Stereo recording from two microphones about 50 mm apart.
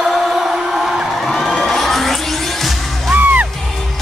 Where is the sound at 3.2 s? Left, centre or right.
Right.